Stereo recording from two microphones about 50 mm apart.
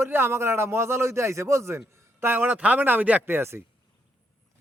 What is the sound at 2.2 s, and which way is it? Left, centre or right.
Speech, right.